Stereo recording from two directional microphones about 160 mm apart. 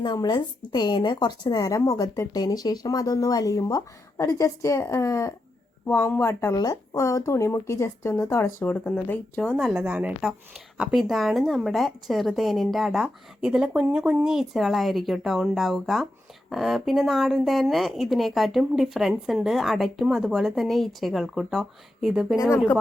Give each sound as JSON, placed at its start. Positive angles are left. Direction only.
{"t": 0.0, "sound": "a woman's voice", "side_deg": 25}
{"t": 9.7, "sound": "a woman's voice", "side_deg": -10}
{"t": 22.4, "sound": "speech", "side_deg": 15}